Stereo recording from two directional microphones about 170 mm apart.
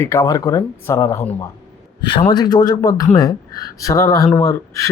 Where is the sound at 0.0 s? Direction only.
15° left (ahead or behind).